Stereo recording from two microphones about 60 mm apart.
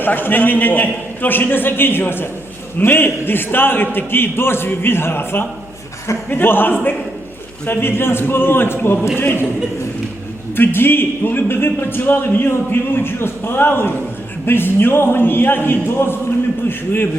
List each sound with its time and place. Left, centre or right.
0.0 s speech: left
10.6 s speech: left